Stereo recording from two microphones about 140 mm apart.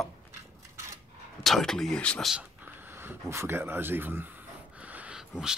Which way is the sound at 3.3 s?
20° right (ahead or behind).